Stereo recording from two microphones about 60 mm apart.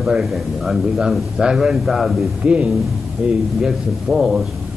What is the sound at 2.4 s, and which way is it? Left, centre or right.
Speech, centre.